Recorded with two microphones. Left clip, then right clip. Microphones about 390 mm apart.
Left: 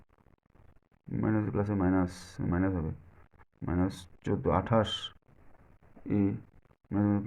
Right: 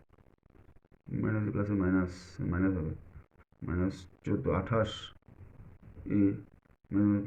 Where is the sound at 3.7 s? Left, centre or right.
Left.